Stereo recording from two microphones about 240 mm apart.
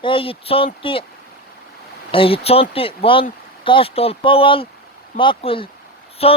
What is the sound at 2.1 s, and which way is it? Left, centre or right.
Speech, left.